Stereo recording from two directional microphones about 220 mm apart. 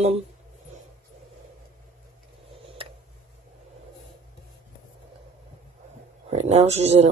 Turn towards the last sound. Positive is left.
turn(degrees=-30)  # may be behind; listen again after turning